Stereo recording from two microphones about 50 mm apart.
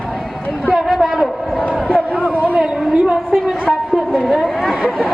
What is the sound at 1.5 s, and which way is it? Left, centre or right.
Speech, left.